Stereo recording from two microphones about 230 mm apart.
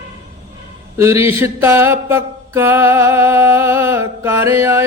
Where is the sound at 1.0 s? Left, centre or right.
Centre.